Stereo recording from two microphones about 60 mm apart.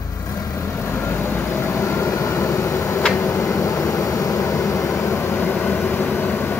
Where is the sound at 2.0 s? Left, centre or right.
Left.